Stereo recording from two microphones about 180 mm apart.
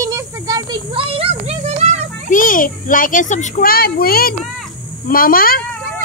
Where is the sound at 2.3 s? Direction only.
50° left (ahead or behind).